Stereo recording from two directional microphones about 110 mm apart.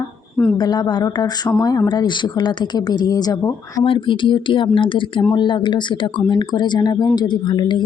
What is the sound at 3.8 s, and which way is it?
Speech, 50° left (ahead or behind).